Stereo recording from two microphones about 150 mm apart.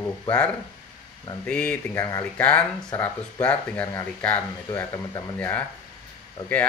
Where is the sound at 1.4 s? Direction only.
5° left (ahead or behind).